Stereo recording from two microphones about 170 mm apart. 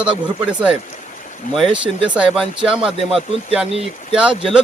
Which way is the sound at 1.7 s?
30° right (ahead or behind).